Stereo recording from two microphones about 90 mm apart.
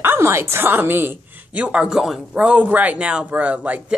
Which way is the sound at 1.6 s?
10° right (ahead or behind).